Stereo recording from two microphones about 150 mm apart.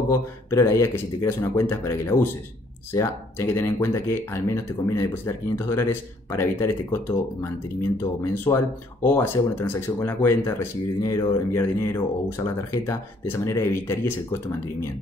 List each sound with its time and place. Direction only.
0.5 s speech: 20° left (ahead or behind)